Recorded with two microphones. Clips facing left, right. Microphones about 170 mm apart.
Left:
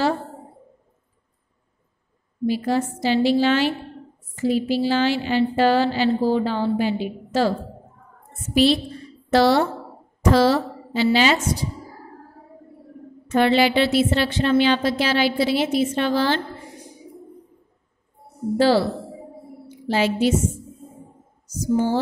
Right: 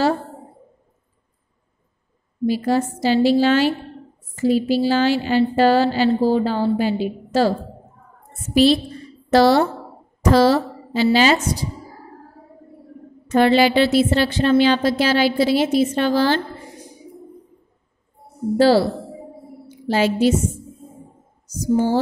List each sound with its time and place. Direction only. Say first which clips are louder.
2.4 s a woman's voice: right 2 dB; 40° right (ahead or behind)
9.3 s a woman's voice: right 3 dB; 40° right (ahead or behind)
13.3 s a woman's voice: right 3 dB; 40° right (ahead or behind)
18.6 s a woman's voice: right 3 dB; 35° right (ahead or behind)
19.9 s a woman's voice: right 3 dB; 40° right (ahead or behind)
21.5 s a woman's voice: right 2 dB; 40° right (ahead or behind)